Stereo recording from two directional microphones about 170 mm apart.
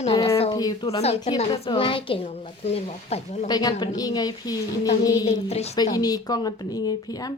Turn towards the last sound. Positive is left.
turn(degrees=20)  # may be behind; listen again after turning